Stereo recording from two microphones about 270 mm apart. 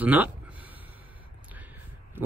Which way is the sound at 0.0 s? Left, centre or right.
Centre.